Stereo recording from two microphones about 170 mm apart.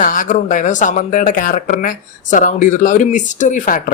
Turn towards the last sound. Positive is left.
turn(degrees=50)  # may be behind; listen again after turning